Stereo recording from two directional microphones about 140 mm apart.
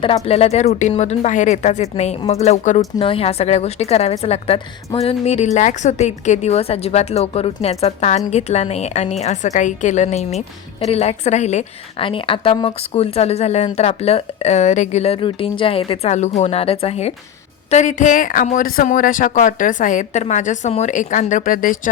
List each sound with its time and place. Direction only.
0.0 s speech: 40° left (ahead or behind)
12.0 s speech: 40° left (ahead or behind)
17.7 s a man's voice: 60° left (ahead or behind); by 21.8 s 75° left (ahead or behind)